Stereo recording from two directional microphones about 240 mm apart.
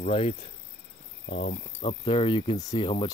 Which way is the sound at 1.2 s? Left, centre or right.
Left.